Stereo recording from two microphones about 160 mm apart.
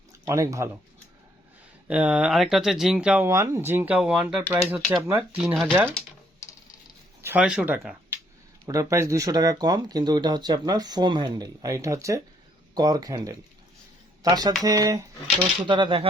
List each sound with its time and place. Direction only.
0.1 s speech: 20° right (ahead or behind)
1.9 s speech: 10° right (ahead or behind)
7.2 s speech: 10° right (ahead or behind)
8.6 s speech: 20° right (ahead or behind)